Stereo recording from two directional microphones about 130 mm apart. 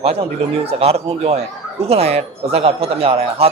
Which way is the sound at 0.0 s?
50° right (ahead or behind).